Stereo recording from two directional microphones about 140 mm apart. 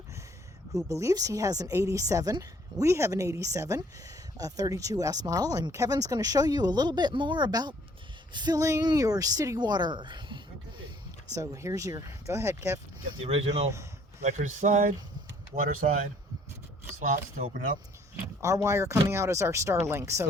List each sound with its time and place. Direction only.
0.9 s speech: 20° right (ahead or behind)
11.3 s speech: 20° right (ahead or behind)
13.2 s speech: 45° right (ahead or behind)
14.2 s speech: 60° right (ahead or behind)
17.0 s speech: 70° right (ahead or behind)
18.3 s speech: 20° right (ahead or behind)